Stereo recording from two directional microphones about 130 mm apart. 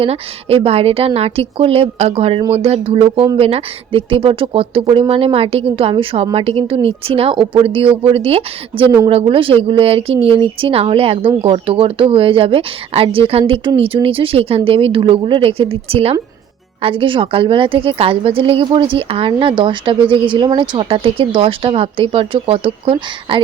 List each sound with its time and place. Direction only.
0.0 s a woman's voice: 50° right (ahead or behind)